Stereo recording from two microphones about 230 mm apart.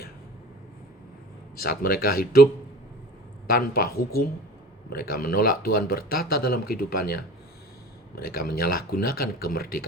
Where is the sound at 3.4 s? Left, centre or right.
Left.